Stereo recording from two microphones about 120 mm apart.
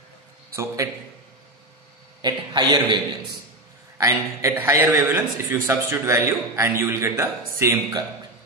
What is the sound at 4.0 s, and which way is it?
A man's voice, 25° right (ahead or behind).